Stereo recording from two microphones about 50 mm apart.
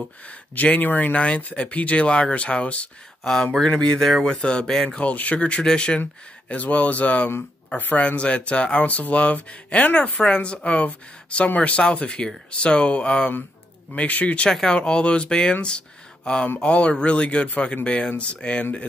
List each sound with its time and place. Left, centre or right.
0.3 s speech: left
3.5 s speech: centre
14.5 s speech: centre
16.5 s speech: left